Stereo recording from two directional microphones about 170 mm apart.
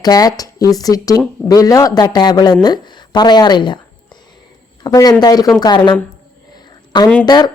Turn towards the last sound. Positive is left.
turn(degrees=25)  # may be behind; listen again after turning